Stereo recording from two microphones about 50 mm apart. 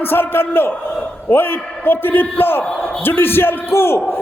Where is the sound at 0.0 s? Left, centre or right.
Left.